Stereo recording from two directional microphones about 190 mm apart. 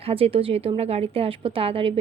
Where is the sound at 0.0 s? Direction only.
30° right (ahead or behind).